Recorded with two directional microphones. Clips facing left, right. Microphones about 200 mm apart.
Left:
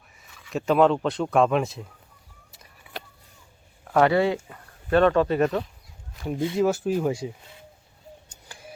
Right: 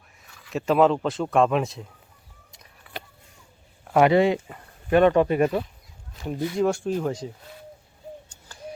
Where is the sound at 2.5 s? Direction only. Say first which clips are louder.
Even; centre (ahead or behind).